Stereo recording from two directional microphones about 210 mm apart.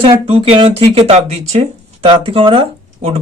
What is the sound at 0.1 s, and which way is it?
Speech, 25° right (ahead or behind).